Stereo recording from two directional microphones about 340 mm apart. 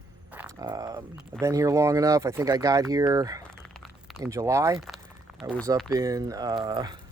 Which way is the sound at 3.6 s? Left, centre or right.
Centre.